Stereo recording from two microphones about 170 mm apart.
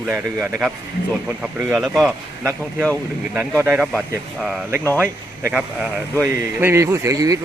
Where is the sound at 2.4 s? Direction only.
15° right (ahead or behind).